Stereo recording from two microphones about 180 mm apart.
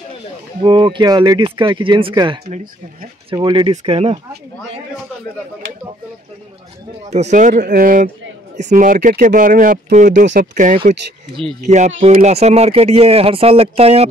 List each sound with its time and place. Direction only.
0.6 s speech: 25° right (ahead or behind)
2.5 s speech: 50° right (ahead or behind)
3.3 s speech: 25° right (ahead or behind)
7.1 s speech: 40° right (ahead or behind)